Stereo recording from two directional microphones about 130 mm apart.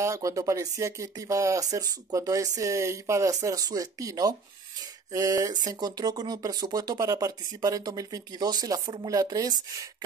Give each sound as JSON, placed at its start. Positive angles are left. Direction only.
{"t": 0.0, "sound": "speech", "side_deg": -25}